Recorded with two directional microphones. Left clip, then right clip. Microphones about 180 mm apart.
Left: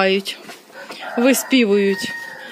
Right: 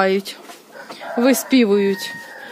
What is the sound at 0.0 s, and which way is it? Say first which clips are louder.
Speech: left 1 dB; 5° left (ahead or behind).